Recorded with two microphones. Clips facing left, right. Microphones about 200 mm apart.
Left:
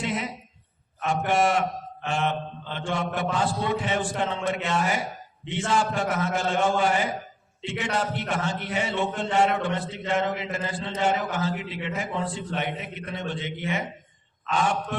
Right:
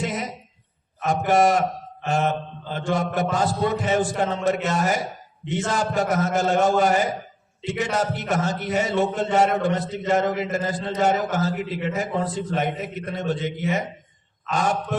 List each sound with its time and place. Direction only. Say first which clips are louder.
0.0 s a sound: right 2 dB; 40° right (ahead or behind)
1.3 s a man's voice: right 5 dB; 40° right (ahead or behind)
14.5 s a man's voice: right 2 dB; 40° right (ahead or behind)